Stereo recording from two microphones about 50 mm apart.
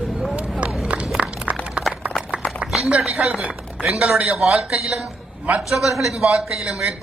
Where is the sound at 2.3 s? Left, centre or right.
Right.